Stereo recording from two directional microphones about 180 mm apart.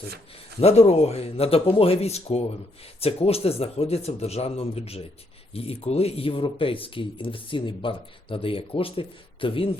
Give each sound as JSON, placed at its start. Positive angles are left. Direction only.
{"t": 0.6, "sound": "speech", "side_deg": 35}